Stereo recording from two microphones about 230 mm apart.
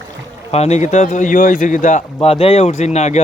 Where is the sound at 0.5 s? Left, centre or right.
Left.